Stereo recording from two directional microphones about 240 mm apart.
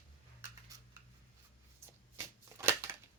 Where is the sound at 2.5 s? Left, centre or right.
Centre.